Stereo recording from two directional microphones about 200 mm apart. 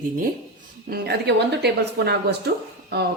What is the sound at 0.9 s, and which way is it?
A woman's voice, 55° right (ahead or behind).